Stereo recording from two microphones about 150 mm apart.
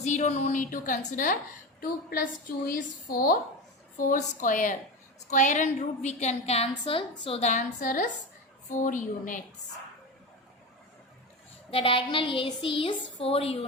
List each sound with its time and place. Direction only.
0.0 s a woman's voice: 50° left (ahead or behind)
3.1 s a woman's voice: 70° left (ahead or behind)
11.7 s a woman's voice: 35° left (ahead or behind)